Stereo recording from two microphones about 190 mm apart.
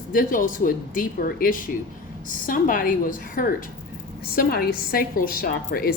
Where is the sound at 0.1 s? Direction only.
45° left (ahead or behind).